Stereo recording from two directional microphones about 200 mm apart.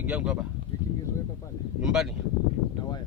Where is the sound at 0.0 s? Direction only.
5° right (ahead or behind).